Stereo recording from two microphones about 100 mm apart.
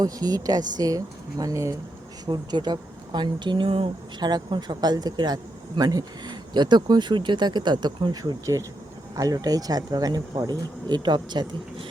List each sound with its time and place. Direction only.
0.0 s speech: 40° right (ahead or behind); by 3.8 s 60° right (ahead or behind)
4.2 s speech: 45° right (ahead or behind)
8.1 s speech: 35° right (ahead or behind)